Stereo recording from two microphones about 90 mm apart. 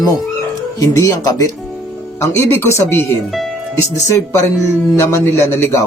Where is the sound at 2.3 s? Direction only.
25° left (ahead or behind).